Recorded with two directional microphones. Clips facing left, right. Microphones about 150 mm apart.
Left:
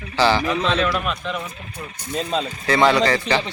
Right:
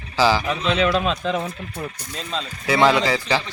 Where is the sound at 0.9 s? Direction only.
25° right (ahead or behind).